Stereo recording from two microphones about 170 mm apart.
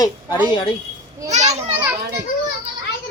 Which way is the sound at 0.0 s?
30° left (ahead or behind).